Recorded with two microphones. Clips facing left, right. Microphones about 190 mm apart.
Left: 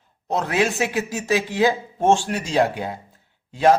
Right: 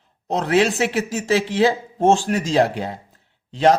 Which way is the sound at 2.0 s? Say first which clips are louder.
Right 2 dB; 40° right (ahead or behind).